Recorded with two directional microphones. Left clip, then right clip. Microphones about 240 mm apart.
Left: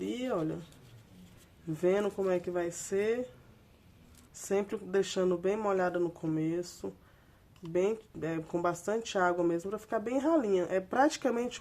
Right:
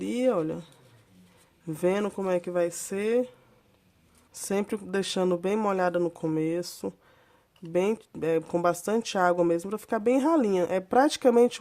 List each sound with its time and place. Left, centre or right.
0.0 s speech: right
1.6 s speech: right
4.4 s speech: right